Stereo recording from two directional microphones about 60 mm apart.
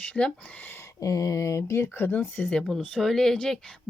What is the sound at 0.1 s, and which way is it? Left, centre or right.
Speech, centre.